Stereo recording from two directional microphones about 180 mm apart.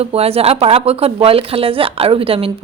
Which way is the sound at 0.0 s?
35° right (ahead or behind).